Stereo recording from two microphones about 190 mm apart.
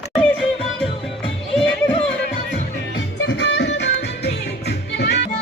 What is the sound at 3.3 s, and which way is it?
Music, 65° left (ahead or behind).